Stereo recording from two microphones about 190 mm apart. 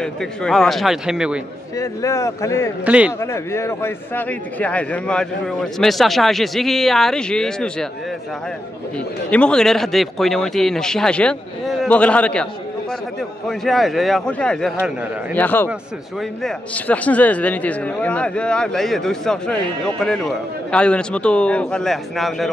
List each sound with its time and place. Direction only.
0.0 s a man's voice: 5° left (ahead or behind)
1.8 s speech: 15° left (ahead or behind)
2.8 s speech: 5° right (ahead or behind)
3.2 s a man's voice: 15° left (ahead or behind)
9.3 s a man's voice: 5° left (ahead or behind)
13.5 s a man's voice: centre (ahead or behind)